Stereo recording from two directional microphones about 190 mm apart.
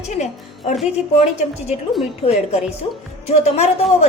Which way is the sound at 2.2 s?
35° left (ahead or behind).